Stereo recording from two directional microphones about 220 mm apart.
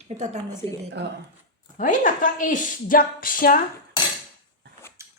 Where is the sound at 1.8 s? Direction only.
35° left (ahead or behind).